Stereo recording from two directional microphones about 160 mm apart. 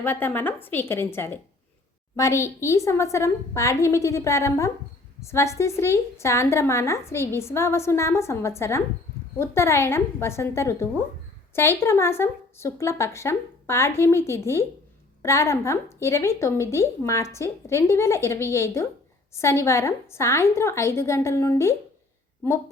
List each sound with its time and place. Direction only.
0.0 s a woman's voice: 15° left (ahead or behind)